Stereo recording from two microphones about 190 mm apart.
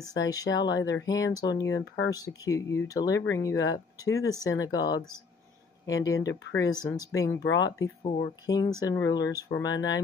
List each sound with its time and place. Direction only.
0.2 s speech: 75° left (ahead or behind)
0.6 s speech: 20° left (ahead or behind)
8.0 s speech: 35° left (ahead or behind)
8.5 s speech: 20° left (ahead or behind)